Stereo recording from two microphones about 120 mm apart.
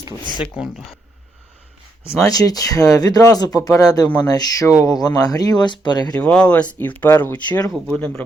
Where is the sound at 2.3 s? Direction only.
30° left (ahead or behind).